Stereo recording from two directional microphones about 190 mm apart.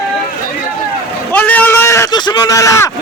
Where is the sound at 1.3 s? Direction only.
10° left (ahead or behind).